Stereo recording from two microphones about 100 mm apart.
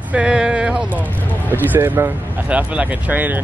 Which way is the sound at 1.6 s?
20° right (ahead or behind).